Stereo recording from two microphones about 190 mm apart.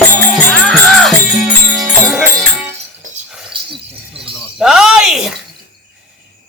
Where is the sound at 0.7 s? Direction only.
Centre (ahead or behind).